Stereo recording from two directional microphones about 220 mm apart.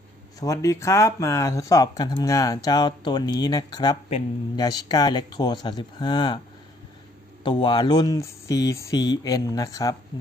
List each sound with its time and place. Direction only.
0.4 s speech: 15° left (ahead or behind)
7.4 s speech: 20° left (ahead or behind)